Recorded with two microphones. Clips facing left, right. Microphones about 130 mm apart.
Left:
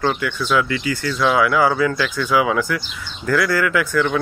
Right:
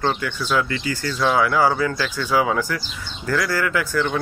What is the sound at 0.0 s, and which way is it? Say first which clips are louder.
Speech: left 2 dB; 30° right (ahead or behind).